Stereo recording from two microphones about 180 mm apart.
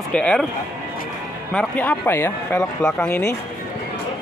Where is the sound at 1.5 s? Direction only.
5° left (ahead or behind).